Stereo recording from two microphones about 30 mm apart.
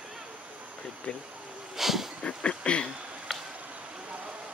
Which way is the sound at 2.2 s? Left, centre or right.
Left.